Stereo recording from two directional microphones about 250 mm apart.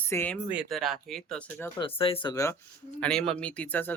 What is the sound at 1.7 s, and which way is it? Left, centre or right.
Speech, left.